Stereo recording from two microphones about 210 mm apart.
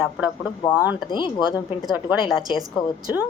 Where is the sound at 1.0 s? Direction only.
20° left (ahead or behind).